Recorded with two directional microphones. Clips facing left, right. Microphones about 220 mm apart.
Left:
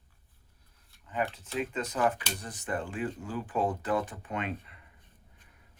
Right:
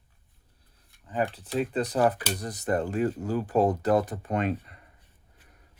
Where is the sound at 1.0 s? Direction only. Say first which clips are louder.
Right 4 dB; 35° right (ahead or behind).